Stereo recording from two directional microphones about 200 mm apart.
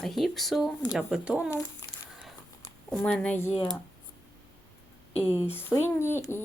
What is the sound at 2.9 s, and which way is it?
Speech, 5° left (ahead or behind).